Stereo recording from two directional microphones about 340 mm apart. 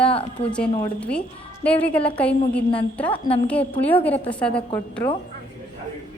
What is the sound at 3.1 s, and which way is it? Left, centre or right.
Speech, centre.